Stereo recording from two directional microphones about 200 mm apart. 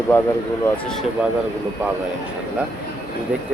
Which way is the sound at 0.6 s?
5° left (ahead or behind).